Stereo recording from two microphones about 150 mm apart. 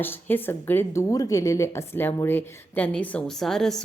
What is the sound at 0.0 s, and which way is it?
A woman's voice, 15° left (ahead or behind).